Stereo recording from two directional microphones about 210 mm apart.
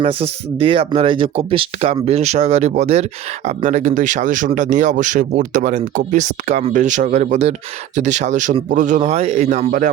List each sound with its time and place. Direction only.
0.0 s speech: 25° right (ahead or behind)